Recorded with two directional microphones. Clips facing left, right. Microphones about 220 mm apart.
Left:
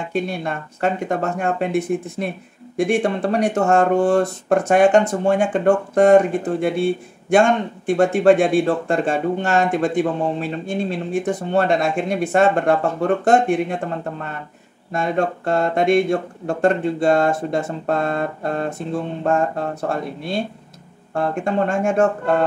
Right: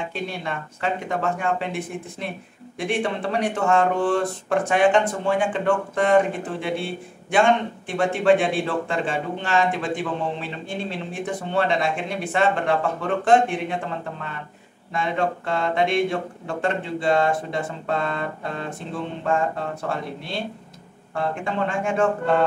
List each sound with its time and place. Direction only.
0.1 s speech: 45° left (ahead or behind)
14.9 s speech: 45° left (ahead or behind)